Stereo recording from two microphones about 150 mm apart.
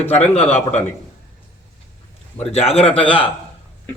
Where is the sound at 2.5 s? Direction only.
45° left (ahead or behind).